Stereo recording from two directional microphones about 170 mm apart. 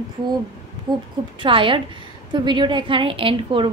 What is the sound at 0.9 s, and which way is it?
A woman's voice, 25° right (ahead or behind).